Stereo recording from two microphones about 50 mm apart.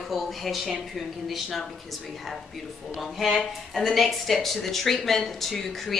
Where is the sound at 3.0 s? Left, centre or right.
Centre.